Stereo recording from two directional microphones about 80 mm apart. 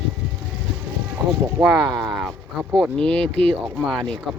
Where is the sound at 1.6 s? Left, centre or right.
Right.